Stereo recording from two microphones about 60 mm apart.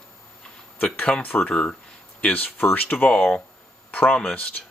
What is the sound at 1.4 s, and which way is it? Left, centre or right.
Speech, centre.